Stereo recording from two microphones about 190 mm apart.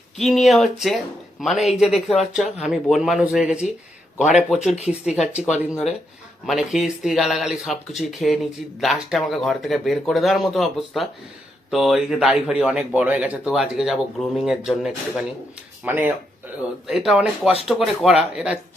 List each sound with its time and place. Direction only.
0.2 s speech: centre (ahead or behind)
6.4 s speech: centre (ahead or behind)